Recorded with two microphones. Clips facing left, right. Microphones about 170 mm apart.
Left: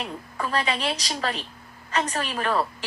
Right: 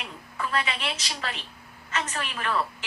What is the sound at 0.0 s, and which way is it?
A woman's voice, 35° left (ahead or behind).